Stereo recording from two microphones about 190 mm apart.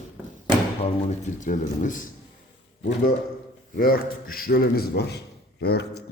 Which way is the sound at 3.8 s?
50° left (ahead or behind).